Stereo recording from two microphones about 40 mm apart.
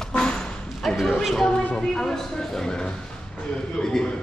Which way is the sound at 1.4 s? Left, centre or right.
Centre.